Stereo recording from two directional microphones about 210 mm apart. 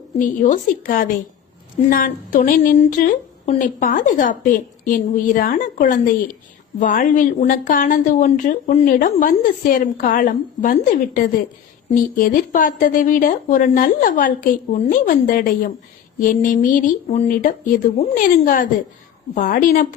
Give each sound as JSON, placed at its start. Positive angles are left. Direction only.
{"t": 0.2, "sound": "speech", "side_deg": 40}